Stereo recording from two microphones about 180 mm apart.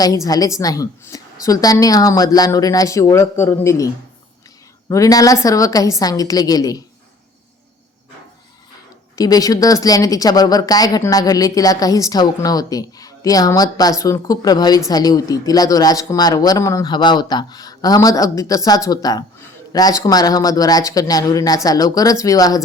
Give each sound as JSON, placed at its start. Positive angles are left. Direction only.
{"t": 0.3, "sound": "a woman's voice", "side_deg": 20}
{"t": 9.1, "sound": "a woman's voice", "side_deg": 20}